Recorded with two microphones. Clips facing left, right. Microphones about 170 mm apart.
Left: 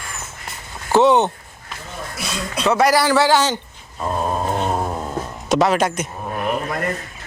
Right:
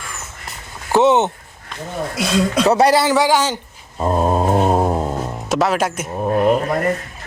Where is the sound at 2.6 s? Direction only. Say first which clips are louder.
Right 1 dB; 35° right (ahead or behind).